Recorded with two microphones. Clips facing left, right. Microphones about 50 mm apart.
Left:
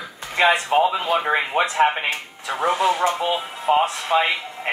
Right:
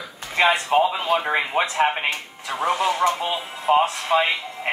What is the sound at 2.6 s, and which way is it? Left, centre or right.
Speech, left.